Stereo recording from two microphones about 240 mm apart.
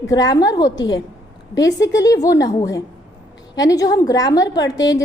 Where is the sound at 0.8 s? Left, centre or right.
Left.